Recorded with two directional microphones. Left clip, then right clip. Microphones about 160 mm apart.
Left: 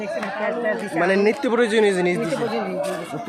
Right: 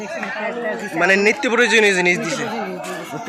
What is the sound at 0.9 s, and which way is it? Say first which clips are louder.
A man's voice: right 5 dB; 15° left (ahead or behind).